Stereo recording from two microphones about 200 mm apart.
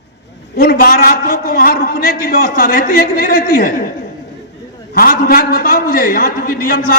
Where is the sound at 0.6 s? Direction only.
50° left (ahead or behind).